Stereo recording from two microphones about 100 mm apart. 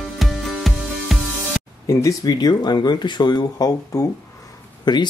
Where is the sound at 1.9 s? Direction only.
30° left (ahead or behind).